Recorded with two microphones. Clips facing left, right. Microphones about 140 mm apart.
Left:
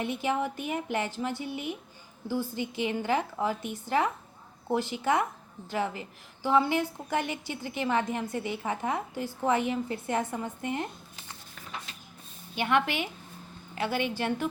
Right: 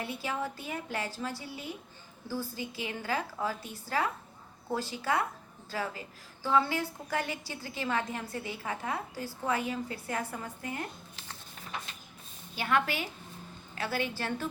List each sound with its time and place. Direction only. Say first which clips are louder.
0.0 s a woman's voice: left 6 dB; 20° left (ahead or behind)
12.5 s a woman's voice: left 3 dB; 20° left (ahead or behind)